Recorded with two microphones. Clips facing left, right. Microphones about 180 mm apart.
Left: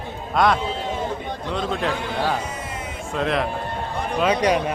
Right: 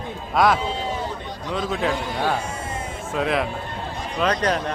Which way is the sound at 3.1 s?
Centre (ahead or behind).